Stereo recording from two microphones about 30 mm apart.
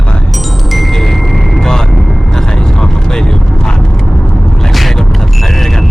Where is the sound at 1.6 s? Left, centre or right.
Left.